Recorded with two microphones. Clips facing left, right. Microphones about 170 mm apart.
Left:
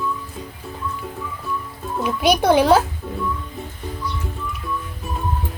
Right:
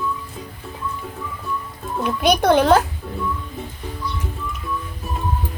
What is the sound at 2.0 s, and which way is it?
Speech, centre (ahead or behind).